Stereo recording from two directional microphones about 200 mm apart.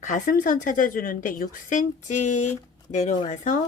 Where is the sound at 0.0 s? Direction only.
40° left (ahead or behind).